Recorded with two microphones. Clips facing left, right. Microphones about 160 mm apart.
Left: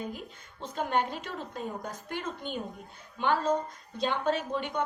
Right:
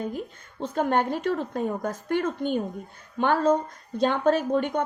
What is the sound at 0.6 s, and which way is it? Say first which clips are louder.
A woman's voice: right 6 dB; 55° right (ahead or behind).